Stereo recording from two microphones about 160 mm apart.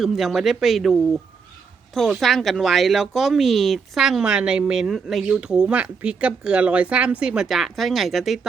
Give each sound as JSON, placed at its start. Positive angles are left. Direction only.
{"t": 0.0, "sound": "speech", "side_deg": 0}